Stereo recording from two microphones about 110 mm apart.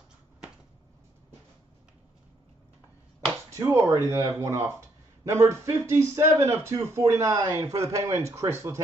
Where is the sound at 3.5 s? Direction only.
25° right (ahead or behind).